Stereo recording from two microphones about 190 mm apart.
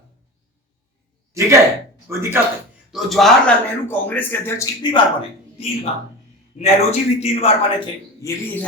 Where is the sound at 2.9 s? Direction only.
Centre (ahead or behind).